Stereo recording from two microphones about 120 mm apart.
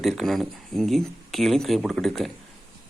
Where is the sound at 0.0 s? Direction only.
Centre (ahead or behind).